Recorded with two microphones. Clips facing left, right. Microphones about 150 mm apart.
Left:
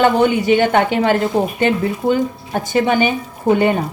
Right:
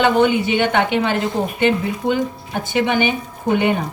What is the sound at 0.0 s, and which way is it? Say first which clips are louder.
Speech: left 1 dB; 45° left (ahead or behind).